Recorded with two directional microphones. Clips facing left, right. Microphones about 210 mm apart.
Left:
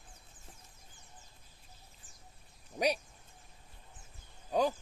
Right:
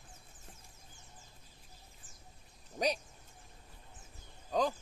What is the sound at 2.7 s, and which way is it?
Speech, 10° left (ahead or behind).